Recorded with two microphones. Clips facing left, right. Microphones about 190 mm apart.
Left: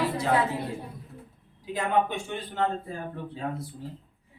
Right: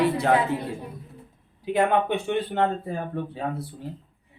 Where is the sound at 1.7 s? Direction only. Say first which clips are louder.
Right 4 dB; 65° right (ahead or behind).